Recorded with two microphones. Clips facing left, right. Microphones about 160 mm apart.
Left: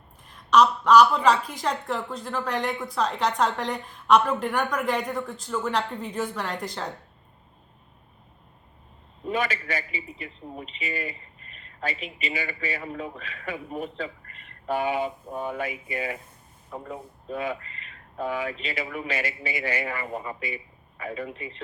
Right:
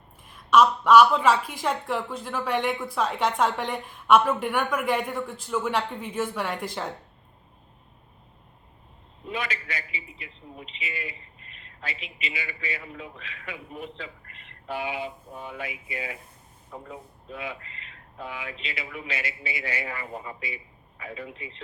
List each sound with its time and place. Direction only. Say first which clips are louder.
0.5 s a woman's voice: even; 5° right (ahead or behind)
9.3 s a man's voice: left 5 dB; 45° left (ahead or behind)